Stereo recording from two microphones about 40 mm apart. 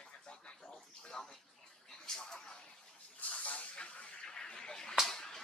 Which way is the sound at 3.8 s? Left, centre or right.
Left.